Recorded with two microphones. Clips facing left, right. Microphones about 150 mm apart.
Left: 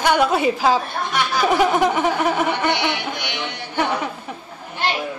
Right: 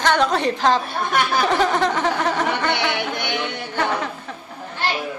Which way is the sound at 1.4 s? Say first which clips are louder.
Left 6 dB; 10° left (ahead or behind).